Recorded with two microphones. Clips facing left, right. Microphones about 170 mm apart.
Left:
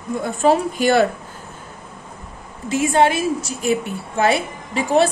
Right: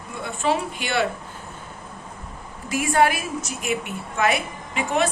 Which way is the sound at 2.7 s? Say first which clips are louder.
Left 4 dB; 25° left (ahead or behind).